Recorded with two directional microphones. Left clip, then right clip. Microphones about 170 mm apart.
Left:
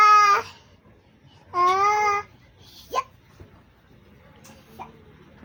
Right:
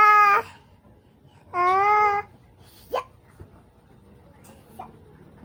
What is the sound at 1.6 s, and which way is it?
Babbling, centre (ahead or behind).